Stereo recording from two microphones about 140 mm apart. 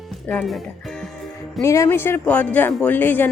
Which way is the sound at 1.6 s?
20° left (ahead or behind).